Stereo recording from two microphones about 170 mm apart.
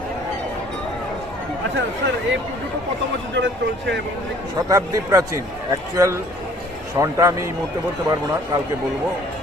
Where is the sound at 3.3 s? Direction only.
90° right.